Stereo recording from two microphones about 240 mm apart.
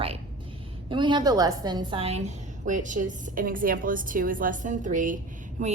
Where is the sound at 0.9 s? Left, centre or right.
Centre.